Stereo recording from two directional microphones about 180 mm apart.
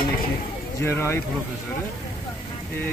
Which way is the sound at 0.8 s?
15° left (ahead or behind).